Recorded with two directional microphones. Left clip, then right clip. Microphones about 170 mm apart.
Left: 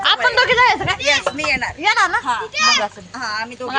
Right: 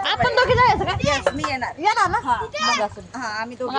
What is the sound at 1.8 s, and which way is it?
Speech, centre (ahead or behind).